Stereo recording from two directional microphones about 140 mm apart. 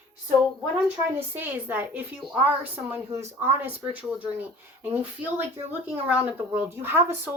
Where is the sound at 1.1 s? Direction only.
15° right (ahead or behind).